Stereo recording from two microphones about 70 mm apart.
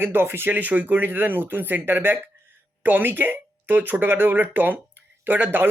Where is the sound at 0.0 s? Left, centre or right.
Right.